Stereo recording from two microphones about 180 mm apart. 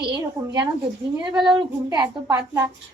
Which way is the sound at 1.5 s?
25° right (ahead or behind).